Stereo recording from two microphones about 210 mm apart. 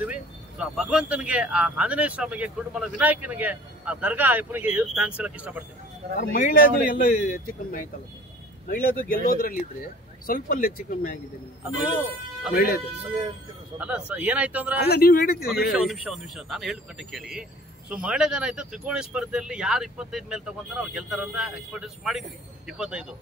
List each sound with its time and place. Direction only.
0.0 s speech: 5° right (ahead or behind)
6.1 s speech: 45° left (ahead or behind)
8.8 s speech: 40° left (ahead or behind)
11.6 s a man's voice: 5° right (ahead or behind)
12.5 s speech: 50° left (ahead or behind)
13.7 s speech: 5° right (ahead or behind)
14.8 s speech: 50° left (ahead or behind)
15.7 s speech: centre (ahead or behind)